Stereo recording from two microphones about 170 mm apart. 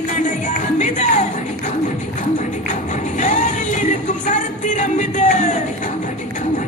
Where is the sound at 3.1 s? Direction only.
45° left (ahead or behind).